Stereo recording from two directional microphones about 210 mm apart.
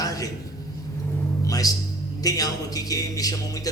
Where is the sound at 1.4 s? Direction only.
15° left (ahead or behind).